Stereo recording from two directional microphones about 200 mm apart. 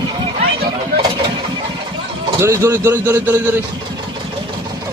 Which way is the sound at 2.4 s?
15° right (ahead or behind).